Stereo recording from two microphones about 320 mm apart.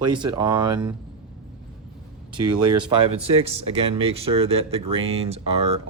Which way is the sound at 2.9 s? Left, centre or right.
Centre.